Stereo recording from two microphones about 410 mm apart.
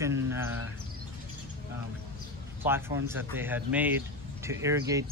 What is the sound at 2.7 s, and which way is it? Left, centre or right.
Speech, centre.